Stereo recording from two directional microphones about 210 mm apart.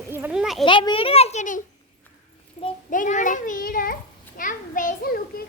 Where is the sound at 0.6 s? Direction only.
25° left (ahead or behind).